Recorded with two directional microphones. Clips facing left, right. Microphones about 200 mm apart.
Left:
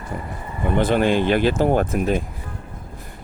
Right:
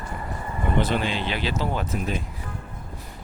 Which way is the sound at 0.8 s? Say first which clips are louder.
Left 12 dB; 50° left (ahead or behind).